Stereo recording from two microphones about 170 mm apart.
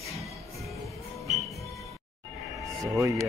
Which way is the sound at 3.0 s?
15° right (ahead or behind).